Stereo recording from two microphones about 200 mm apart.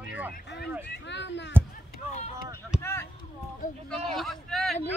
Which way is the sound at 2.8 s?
10° left (ahead or behind).